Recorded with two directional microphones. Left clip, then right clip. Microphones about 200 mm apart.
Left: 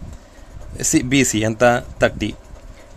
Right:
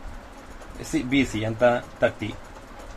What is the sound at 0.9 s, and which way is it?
Speech, 70° left (ahead or behind).